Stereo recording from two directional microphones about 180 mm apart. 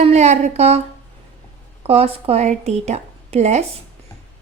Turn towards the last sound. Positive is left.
turn(degrees=-40)  # may be behind; listen again after turning